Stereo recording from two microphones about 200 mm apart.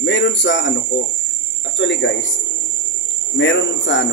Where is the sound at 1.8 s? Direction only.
65° left (ahead or behind).